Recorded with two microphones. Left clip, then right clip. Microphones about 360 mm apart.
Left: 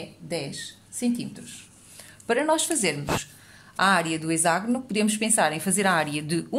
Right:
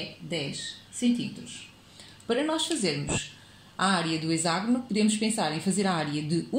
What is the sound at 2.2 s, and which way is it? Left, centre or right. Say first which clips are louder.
A woman's voice: left 4 dB; left.